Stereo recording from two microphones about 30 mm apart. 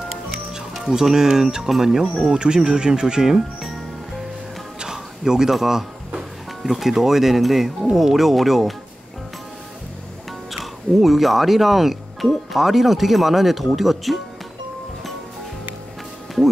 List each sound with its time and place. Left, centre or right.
0.8 s speech: centre
2.3 s speech: right
4.8 s music: centre
5.5 s speech: centre
10.6 s speech: centre